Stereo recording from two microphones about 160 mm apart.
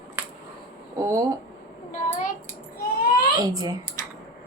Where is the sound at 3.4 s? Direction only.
25° right (ahead or behind).